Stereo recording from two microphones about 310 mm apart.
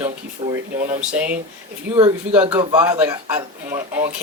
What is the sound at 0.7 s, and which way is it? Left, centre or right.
Speech, right.